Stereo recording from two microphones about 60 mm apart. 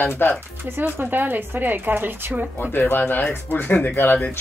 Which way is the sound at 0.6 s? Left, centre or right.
Right.